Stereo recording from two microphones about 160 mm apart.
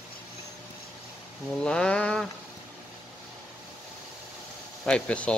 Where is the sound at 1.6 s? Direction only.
5° left (ahead or behind).